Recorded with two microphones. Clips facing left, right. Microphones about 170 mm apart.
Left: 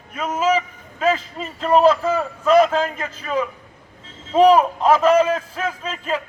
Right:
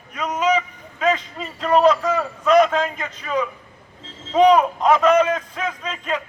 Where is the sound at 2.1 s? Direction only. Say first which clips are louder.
Left 1 dB; 5° left (ahead or behind).